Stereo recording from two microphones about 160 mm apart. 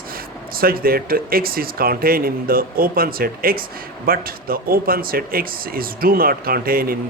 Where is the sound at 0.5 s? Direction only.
65° right (ahead or behind).